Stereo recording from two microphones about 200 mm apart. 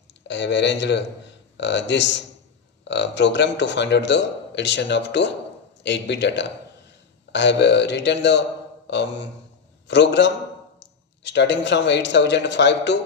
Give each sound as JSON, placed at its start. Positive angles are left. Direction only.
{"t": 0.3, "sound": "a man's voice", "side_deg": 60}